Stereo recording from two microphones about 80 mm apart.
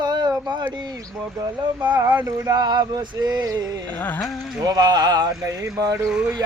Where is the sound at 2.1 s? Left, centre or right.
Right.